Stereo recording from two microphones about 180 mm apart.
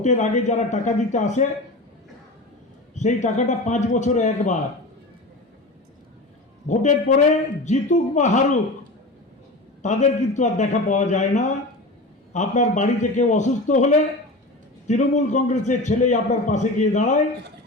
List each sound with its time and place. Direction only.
0.0 s a man's voice: 40° left (ahead or behind)
2.9 s a man's voice: 40° left (ahead or behind)
6.7 s a man's voice: 40° left (ahead or behind)
9.8 s a man's voice: 40° left (ahead or behind)
14.8 s a man's voice: 40° left (ahead or behind)